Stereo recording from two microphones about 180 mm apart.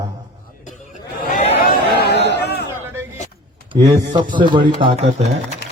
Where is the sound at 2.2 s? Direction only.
65° left (ahead or behind).